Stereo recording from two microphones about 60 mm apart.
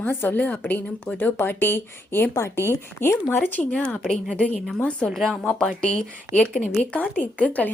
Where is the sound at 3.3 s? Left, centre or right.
Left.